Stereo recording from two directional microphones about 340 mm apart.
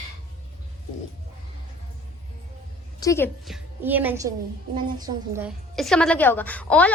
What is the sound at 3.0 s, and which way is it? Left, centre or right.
A woman's voice, centre.